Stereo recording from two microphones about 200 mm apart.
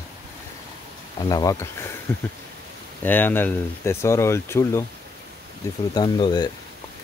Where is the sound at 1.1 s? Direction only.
20° left (ahead or behind).